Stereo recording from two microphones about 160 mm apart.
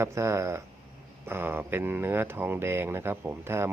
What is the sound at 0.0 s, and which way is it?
Speech, 20° right (ahead or behind).